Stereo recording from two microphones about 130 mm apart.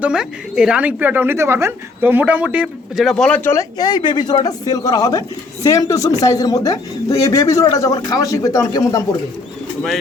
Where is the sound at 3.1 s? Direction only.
10° left (ahead or behind).